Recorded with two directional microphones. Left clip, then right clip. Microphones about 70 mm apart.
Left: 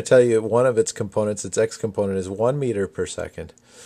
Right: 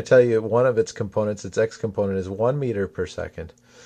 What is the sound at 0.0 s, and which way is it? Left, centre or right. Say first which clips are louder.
Speech: left 1 dB; left.